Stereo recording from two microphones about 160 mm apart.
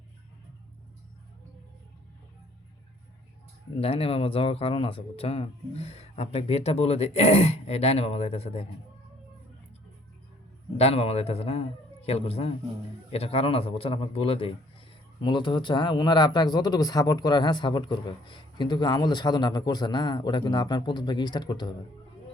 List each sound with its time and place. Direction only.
3.8 s speech: 35° left (ahead or behind)
10.8 s speech: 40° left (ahead or behind)